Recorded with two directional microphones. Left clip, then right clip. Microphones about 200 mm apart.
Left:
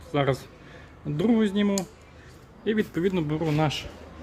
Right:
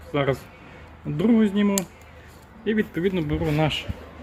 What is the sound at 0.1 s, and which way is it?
A man's voice, centre (ahead or behind).